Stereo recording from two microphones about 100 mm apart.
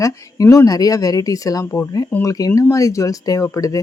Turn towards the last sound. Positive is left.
turn(degrees=35)  # may be behind; listen again after turning